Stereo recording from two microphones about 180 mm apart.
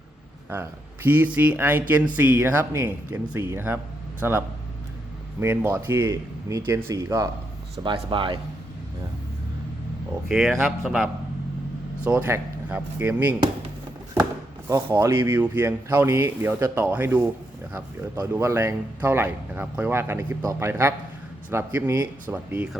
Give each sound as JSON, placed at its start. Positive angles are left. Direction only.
{"t": 0.5, "sound": "speech", "side_deg": -10}
{"t": 10.2, "sound": "speech", "side_deg": 0}
{"t": 14.7, "sound": "speech", "side_deg": -15}